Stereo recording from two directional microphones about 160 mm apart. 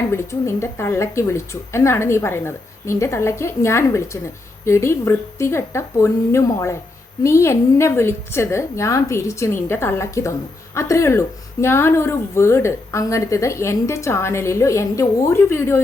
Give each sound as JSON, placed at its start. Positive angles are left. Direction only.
{"t": 0.1, "sound": "speech", "side_deg": 15}